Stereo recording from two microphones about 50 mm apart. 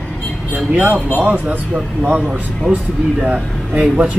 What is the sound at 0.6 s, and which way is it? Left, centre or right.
Speech, right.